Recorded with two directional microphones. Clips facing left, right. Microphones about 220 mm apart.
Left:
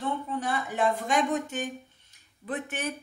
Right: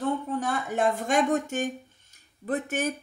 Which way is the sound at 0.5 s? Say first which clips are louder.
Right 1 dB; 45° right (ahead or behind).